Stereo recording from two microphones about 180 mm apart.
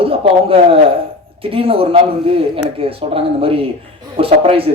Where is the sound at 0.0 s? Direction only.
30° right (ahead or behind).